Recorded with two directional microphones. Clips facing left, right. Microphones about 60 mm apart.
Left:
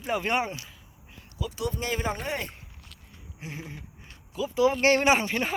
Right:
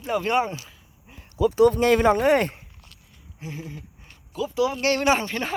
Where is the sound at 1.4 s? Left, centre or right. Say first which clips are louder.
Right 15 dB; right.